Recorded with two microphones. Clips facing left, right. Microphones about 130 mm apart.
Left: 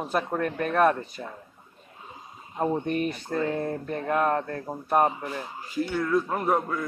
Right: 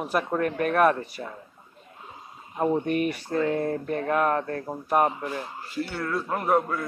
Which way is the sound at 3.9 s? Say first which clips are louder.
Even; 50° right (ahead or behind).